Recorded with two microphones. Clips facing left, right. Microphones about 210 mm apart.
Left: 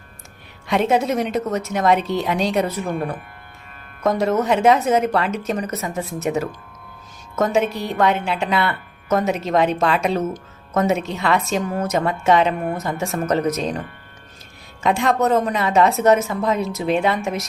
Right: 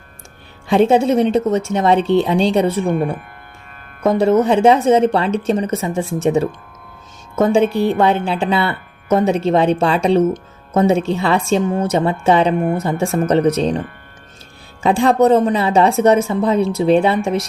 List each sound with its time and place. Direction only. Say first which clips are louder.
0.7 s speech: right 6 dB; 30° right (ahead or behind)
4.0 s speech: right 5 dB; 30° right (ahead or behind)
14.8 s speech: right 6 dB; 30° right (ahead or behind)